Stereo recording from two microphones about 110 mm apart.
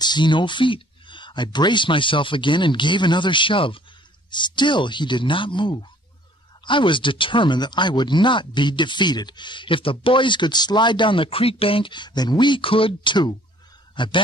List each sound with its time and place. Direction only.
0.0 s speech: 45° left (ahead or behind)